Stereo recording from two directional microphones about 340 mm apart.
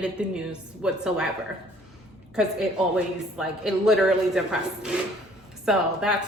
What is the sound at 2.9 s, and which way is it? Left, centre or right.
A woman's voice, centre.